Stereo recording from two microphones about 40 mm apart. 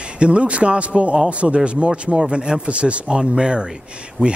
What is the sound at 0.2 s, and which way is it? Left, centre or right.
A man's voice, right.